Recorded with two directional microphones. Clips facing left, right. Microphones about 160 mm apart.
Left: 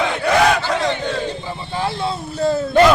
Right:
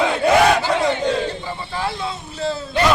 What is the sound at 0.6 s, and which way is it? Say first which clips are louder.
Battle cry: right 2 dB; 10° right (ahead or behind).